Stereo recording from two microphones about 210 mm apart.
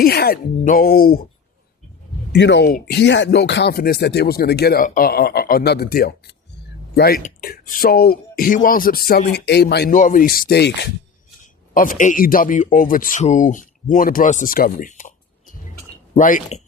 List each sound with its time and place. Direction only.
0.0 s speech: 50° left (ahead or behind)
2.3 s speech: 55° left (ahead or behind)
11.4 s a man's voice: 40° left (ahead or behind)